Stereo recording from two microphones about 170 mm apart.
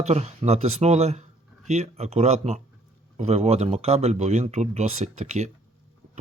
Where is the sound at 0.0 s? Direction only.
40° right (ahead or behind).